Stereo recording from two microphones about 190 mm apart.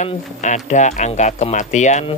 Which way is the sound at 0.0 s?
40° left (ahead or behind).